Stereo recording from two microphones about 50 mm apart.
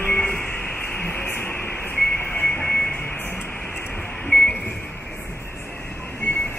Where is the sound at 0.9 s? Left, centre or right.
Left.